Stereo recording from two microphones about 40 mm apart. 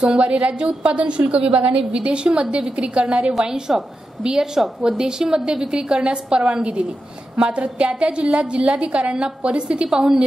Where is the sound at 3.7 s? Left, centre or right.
Centre.